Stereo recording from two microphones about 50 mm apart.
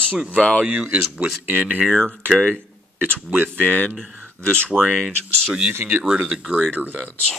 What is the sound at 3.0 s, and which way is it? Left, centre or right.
Speech, right.